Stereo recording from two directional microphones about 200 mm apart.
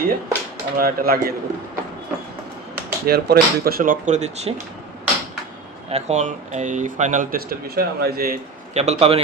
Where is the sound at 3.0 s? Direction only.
55° right (ahead or behind); by 4.5 s 35° right (ahead or behind).